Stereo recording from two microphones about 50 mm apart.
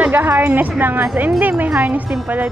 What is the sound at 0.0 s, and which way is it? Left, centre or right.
Music, right.